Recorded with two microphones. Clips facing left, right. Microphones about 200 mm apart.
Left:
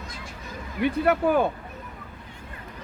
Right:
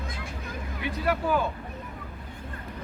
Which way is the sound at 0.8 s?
55° left (ahead or behind).